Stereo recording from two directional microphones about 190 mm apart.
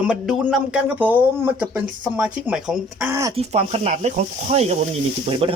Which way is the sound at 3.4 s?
35° right (ahead or behind).